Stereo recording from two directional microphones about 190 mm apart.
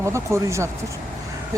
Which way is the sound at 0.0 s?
15° right (ahead or behind).